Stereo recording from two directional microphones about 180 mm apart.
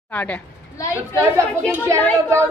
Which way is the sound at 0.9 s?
15° right (ahead or behind).